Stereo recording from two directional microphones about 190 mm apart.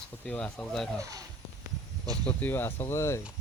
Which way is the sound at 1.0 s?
20° right (ahead or behind).